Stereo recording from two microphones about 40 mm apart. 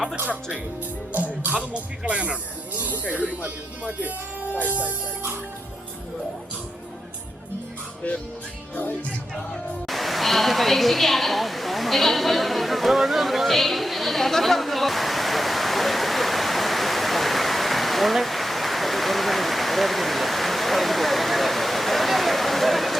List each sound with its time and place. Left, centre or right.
1.1 s speech: right
1.7 s speech: right
2.7 s speech: right
3.2 s speech: right
4.5 s speech: right
9.8 s a sound: centre